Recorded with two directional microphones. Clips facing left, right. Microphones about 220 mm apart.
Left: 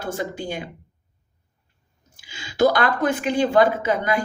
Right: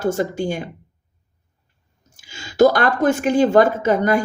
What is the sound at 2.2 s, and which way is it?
A woman's voice, 45° right (ahead or behind).